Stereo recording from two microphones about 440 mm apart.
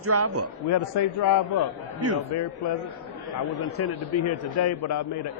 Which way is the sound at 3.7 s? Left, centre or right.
Left.